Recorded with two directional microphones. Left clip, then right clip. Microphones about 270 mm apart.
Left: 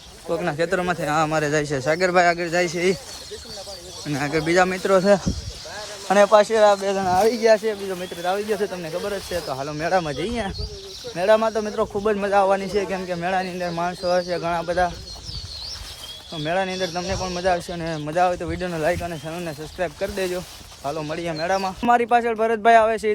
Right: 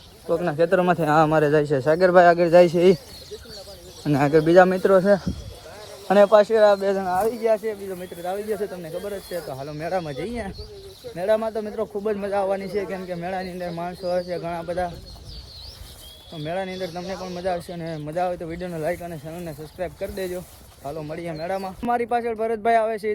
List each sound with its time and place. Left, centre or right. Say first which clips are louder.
0.3 s speech: right 2 dB; centre
4.1 s speech: right 5 dB; centre
7.0 s speech: left 4 dB; left
7.6 s speech: left 4 dB; left
11.2 s speech: left 4 dB; left
16.4 s speech: left 5 dB; left